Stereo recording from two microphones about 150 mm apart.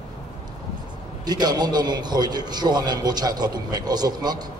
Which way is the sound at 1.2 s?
25° right (ahead or behind).